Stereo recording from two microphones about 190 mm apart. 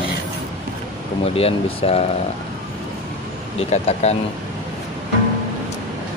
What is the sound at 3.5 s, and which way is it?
Speech, 35° left (ahead or behind).